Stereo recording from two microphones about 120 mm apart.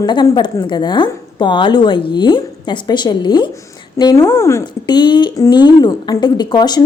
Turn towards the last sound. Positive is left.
turn(degrees=35)  # may be behind; listen again after turning